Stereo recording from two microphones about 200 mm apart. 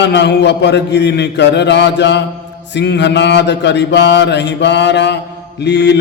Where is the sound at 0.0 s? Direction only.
60° left (ahead or behind).